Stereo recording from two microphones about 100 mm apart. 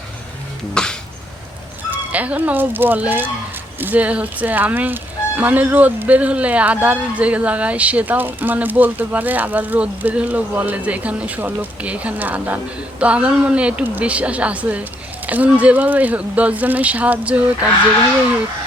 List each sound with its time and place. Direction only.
0.7 s music: 10° left (ahead or behind)
1.9 s speech: 15° right (ahead or behind)